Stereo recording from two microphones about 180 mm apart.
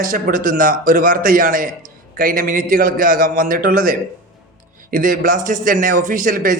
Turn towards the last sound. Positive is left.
turn(degrees=-50)  # may be behind; listen again after turning